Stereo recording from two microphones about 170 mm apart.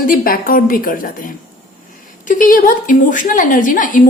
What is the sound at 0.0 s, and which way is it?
A woman's voice, 55° left (ahead or behind).